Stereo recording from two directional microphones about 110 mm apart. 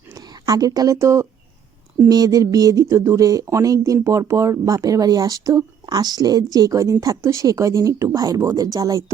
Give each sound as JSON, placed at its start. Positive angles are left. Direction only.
{"t": 0.1, "sound": "speech", "side_deg": -35}